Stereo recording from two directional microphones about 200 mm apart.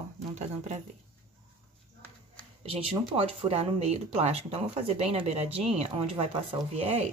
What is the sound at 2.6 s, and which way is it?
Speech, 30° right (ahead or behind).